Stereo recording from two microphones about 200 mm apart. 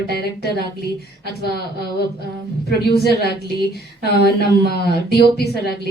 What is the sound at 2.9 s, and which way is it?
A woman's voice, 55° left (ahead or behind).